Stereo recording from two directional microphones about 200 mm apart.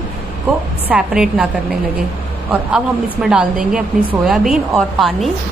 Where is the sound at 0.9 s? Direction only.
5° right (ahead or behind).